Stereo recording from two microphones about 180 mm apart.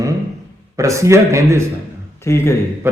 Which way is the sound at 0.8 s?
15° right (ahead or behind).